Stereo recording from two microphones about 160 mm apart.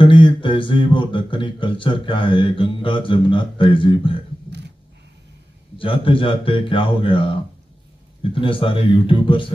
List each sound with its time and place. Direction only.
0.0 s speech: 30° left (ahead or behind)
4.5 s a sound: 90° right
5.8 s speech: 35° left (ahead or behind)